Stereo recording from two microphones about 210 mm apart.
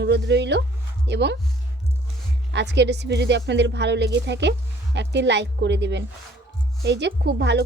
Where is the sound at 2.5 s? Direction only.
55° right (ahead or behind).